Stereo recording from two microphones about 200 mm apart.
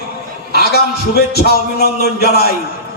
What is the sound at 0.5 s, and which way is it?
A man's voice, 50° left (ahead or behind).